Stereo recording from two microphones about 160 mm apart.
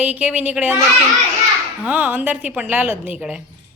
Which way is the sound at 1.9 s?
10° right (ahead or behind).